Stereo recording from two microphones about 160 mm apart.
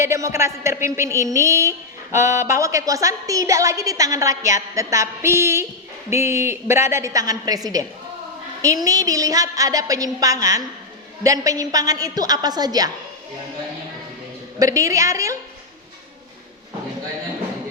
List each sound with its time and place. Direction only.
0.0 s a woman's voice: 20° right (ahead or behind)
14.6 s a woman's voice: 20° right (ahead or behind)